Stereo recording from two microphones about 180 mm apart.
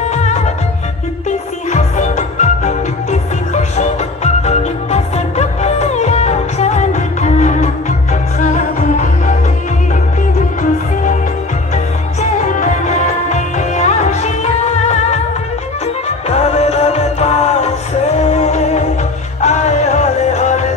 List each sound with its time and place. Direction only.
0.1 s music: 40° left (ahead or behind)
1.7 s music: 40° left (ahead or behind)
11.7 s music: 40° left (ahead or behind)
16.3 s music: 35° left (ahead or behind)